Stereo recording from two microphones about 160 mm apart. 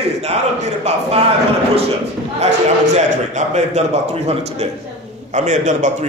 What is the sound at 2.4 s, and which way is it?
A man's voice, 45° right (ahead or behind).